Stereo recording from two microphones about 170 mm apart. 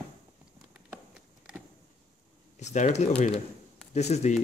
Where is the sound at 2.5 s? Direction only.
40° left (ahead or behind).